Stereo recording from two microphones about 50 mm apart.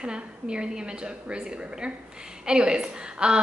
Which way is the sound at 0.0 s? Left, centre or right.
Centre.